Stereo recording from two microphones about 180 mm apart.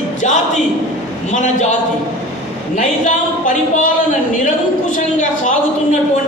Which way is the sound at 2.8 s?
45° left (ahead or behind).